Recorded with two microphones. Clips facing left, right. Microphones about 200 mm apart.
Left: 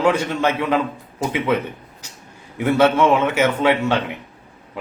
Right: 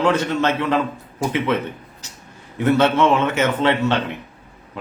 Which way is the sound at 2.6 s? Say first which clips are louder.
Left 1 dB; 10° left (ahead or behind).